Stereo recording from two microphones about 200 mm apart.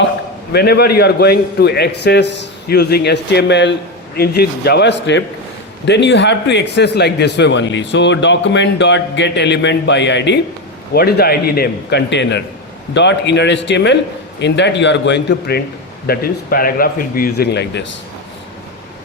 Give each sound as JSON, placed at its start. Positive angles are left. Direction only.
{"t": 0.5, "sound": "a man's voice", "side_deg": 55}